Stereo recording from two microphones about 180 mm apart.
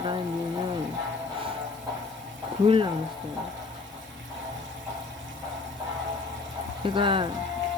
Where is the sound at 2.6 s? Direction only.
30° right (ahead or behind).